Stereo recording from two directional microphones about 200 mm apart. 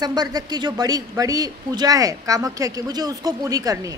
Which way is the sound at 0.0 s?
20° right (ahead or behind).